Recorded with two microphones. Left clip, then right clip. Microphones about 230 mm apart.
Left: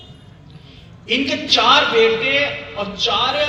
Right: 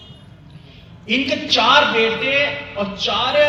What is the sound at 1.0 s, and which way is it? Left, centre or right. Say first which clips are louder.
A man's voice: even; left.